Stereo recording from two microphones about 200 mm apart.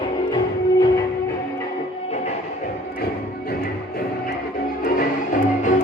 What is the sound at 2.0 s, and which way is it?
Music, 35° left (ahead or behind).